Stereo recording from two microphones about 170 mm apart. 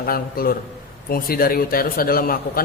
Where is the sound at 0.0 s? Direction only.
60° left (ahead or behind).